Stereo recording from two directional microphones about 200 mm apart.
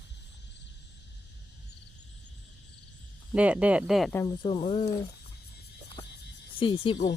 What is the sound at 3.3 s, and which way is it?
Speech, 5° right (ahead or behind).